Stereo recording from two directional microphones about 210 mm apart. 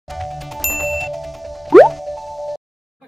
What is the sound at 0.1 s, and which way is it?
Music, centre (ahead or behind).